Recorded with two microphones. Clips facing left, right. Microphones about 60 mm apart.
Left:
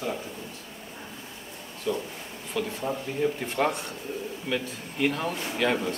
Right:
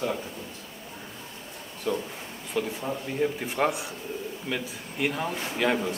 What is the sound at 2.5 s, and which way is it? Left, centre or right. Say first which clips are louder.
Speech: right 1 dB; centre.